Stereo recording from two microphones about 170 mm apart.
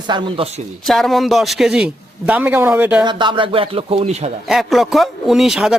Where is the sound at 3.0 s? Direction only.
30° right (ahead or behind).